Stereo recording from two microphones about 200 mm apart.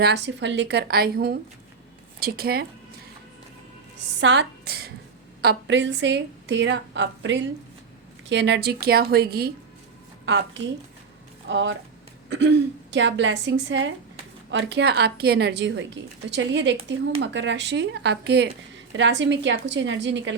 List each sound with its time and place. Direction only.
0.0 s a woman's voice: 60° right (ahead or behind)
4.2 s a woman's voice: 60° right (ahead or behind)
10.2 s a woman's voice: 65° right (ahead or behind)